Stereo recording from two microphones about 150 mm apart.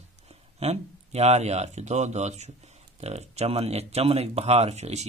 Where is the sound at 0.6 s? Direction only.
45° right (ahead or behind).